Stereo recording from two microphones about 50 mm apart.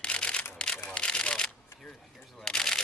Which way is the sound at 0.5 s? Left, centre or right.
Centre.